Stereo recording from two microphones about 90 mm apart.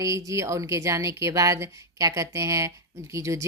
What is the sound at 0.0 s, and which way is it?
A woman's voice, 35° right (ahead or behind).